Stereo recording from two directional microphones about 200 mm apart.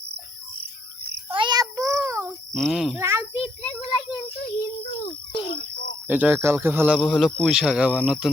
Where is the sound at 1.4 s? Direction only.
20° right (ahead or behind).